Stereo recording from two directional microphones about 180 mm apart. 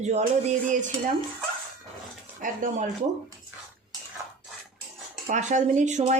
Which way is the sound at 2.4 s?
50° right (ahead or behind).